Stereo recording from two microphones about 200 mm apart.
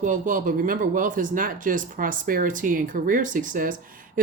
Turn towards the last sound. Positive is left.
turn(degrees=-45)  # may be behind; listen again after turning